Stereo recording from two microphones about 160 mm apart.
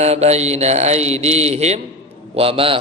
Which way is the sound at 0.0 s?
40° right (ahead or behind).